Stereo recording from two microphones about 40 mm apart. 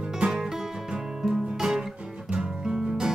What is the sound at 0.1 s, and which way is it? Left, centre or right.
Music, centre.